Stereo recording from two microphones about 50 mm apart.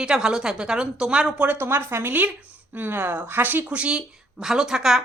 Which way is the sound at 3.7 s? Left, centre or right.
Right.